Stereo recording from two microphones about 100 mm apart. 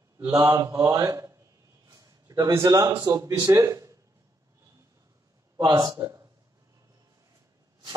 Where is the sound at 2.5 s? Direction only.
35° right (ahead or behind).